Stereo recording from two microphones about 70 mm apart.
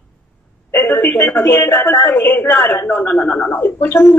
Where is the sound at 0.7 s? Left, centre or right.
Left.